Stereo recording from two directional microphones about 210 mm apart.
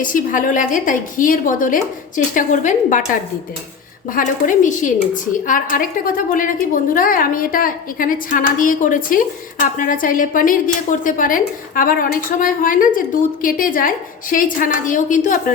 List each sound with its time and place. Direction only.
0.0 s a woman's voice: 40° left (ahead or behind)
4.1 s a woman's voice: 40° left (ahead or behind)